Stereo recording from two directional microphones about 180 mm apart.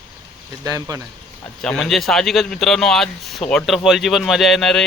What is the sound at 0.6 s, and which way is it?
Speech, 20° right (ahead or behind).